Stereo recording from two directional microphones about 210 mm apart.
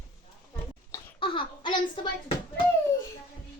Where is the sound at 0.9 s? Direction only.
25° left (ahead or behind).